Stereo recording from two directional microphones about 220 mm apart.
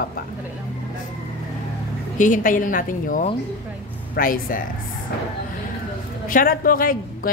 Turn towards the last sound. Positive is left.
turn(degrees=40)  # may be behind; listen again after turning